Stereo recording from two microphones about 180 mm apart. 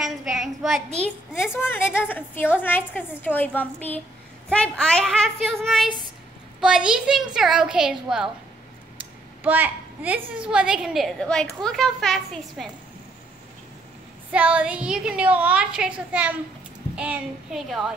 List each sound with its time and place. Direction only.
0.0 s child singing: centre (ahead or behind)
0.9 s a child's voice: 10° left (ahead or behind)
9.4 s a woman's voice: 10° right (ahead or behind)
14.3 s a woman's voice: 5° right (ahead or behind)